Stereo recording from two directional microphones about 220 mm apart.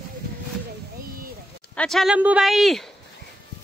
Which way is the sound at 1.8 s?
Centre (ahead or behind).